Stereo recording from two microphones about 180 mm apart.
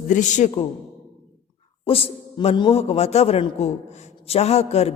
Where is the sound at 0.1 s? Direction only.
45° left (ahead or behind).